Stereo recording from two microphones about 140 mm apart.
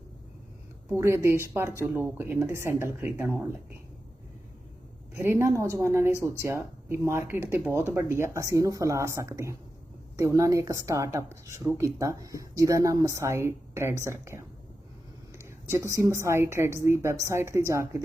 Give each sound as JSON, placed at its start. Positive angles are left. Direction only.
{"t": 0.9, "sound": "a woman's voice", "side_deg": -20}
{"t": 5.1, "sound": "a woman's voice", "side_deg": -20}
{"t": 15.7, "sound": "a woman's voice", "side_deg": -20}